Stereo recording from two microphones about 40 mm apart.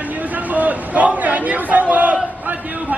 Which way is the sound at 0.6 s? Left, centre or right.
Right.